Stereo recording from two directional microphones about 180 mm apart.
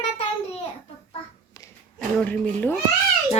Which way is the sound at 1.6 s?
20° left (ahead or behind).